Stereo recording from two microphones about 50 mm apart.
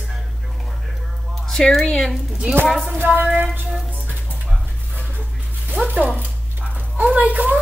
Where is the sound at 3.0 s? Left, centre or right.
Right.